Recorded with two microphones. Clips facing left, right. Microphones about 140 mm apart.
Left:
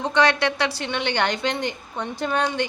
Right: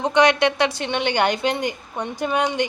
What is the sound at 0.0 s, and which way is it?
A woman's voice, 20° right (ahead or behind).